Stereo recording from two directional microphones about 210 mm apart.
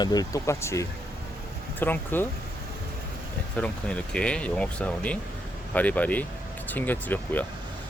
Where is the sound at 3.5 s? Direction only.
5° left (ahead or behind).